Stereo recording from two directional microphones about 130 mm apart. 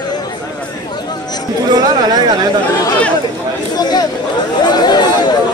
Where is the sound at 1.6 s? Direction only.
30° right (ahead or behind).